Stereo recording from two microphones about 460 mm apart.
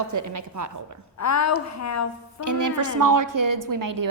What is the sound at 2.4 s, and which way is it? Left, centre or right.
A woman's voice, right.